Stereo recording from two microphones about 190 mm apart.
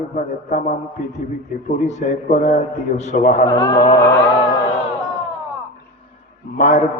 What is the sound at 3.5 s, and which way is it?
Speech, 15° left (ahead or behind).